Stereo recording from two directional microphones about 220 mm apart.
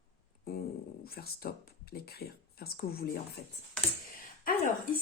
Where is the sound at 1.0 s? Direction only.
45° left (ahead or behind).